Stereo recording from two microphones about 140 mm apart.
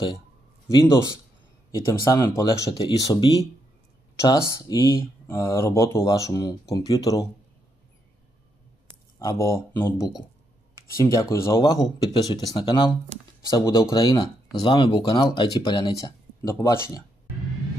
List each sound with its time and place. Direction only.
0.7 s speech: 25° left (ahead or behind)
9.2 s speech: 20° left (ahead or behind)
11.2 s speech: 20° left (ahead or behind); by 12.9 s 35° left (ahead or behind)
13.5 s speech: 25° left (ahead or behind)
14.6 s speech: 40° left (ahead or behind)
16.4 s speech: 20° left (ahead or behind)